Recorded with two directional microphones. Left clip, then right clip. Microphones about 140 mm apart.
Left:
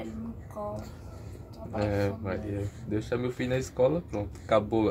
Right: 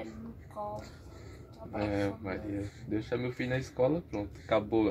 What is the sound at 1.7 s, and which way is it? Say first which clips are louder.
Speech: left 3 dB; 25° right (ahead or behind).